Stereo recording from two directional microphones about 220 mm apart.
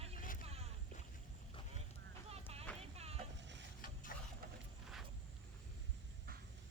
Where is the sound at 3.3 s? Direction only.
55° right (ahead or behind).